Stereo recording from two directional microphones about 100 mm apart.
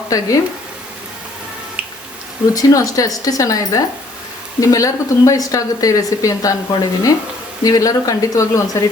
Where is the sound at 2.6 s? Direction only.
35° left (ahead or behind).